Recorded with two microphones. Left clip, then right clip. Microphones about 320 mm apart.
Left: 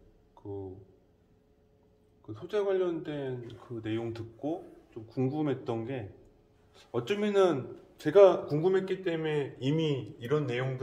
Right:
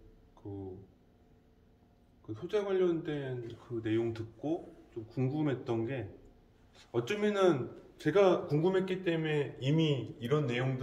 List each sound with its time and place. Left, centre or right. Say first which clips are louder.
2.2 s a man's voice: left 3 dB; centre